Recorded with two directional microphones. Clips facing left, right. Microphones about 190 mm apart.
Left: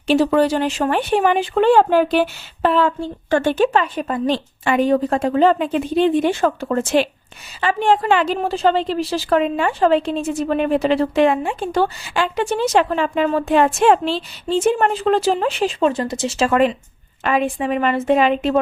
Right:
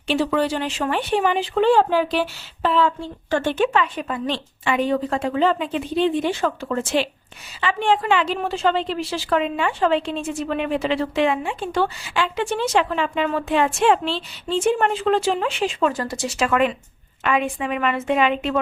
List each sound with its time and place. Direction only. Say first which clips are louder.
0.1 s a woman's voice: left 5 dB; 40° left (ahead or behind)
3.5 s a woman's voice: left 3 dB; 40° left (ahead or behind)
15.9 s a woman's voice: left 4 dB; 20° left (ahead or behind); by 18.6 s 40° left (ahead or behind)